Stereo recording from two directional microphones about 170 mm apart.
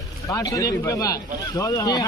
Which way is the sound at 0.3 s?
20° left (ahead or behind).